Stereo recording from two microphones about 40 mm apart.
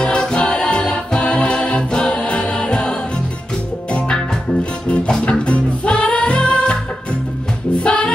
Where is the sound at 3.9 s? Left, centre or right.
Left.